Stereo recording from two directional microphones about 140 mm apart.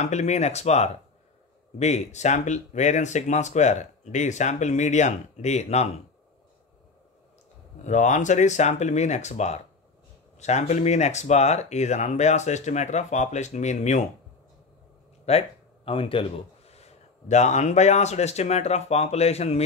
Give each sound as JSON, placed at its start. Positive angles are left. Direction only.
{"t": 0.0, "sound": "speech", "side_deg": 55}
{"t": 7.8, "sound": "speech", "side_deg": 60}
{"t": 15.2, "sound": "speech", "side_deg": 45}